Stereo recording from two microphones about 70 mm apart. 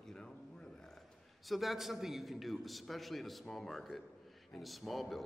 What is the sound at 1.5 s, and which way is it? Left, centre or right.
A man's voice, centre.